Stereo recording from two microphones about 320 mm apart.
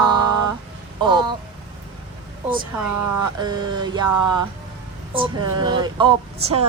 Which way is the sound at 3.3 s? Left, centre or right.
Centre.